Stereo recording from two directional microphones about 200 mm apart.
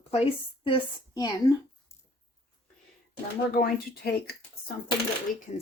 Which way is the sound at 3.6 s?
50° left (ahead or behind).